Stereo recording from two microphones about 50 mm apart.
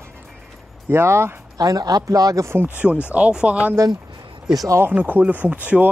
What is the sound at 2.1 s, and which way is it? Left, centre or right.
Speech, right.